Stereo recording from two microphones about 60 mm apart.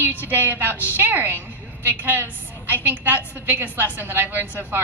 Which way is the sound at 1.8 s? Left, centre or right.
Right.